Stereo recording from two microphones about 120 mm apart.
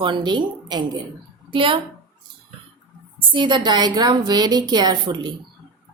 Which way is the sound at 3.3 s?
40° right (ahead or behind).